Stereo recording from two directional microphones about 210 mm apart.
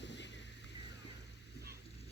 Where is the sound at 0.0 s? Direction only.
55° left (ahead or behind).